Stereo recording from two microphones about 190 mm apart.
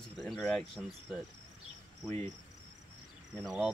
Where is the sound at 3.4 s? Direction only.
Centre (ahead or behind).